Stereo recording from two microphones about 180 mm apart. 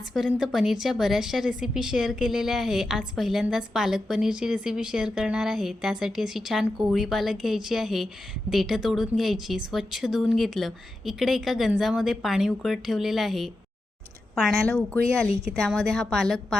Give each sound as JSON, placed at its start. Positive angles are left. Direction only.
{"t": 0.1, "sound": "speech", "side_deg": 0}